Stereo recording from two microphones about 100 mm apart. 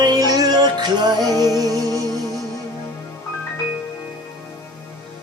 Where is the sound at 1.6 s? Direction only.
40° right (ahead or behind).